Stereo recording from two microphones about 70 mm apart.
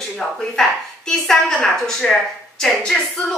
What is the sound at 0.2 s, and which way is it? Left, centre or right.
A woman's voice, centre.